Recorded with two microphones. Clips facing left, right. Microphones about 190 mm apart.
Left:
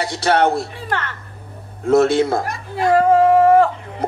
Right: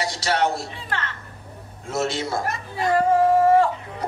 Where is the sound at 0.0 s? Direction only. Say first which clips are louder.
Left 6 dB; 55° left (ahead or behind).